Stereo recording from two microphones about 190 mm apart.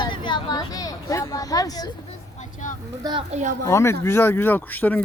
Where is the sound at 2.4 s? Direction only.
40° left (ahead or behind).